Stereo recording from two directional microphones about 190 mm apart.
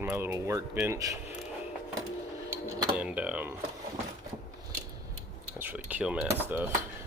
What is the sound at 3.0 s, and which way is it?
Speech, 5° right (ahead or behind).